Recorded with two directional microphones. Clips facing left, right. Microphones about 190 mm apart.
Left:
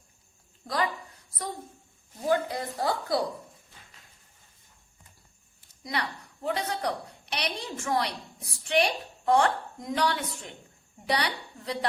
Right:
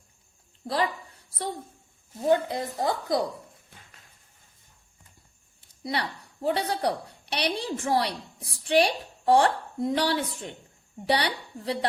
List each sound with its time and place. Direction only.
0.7 s a sound: 30° right (ahead or behind)
2.2 s a woman's voice: 25° right (ahead or behind)
5.8 s a woman's voice: 30° right (ahead or behind)